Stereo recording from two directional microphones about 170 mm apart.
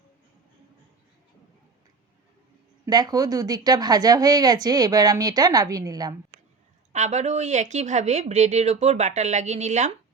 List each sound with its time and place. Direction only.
2.8 s speech: 20° right (ahead or behind)
6.9 s a woman's voice: 40° right (ahead or behind)